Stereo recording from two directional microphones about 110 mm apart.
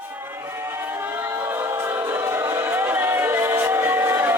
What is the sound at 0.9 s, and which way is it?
Choir, 20° right (ahead or behind).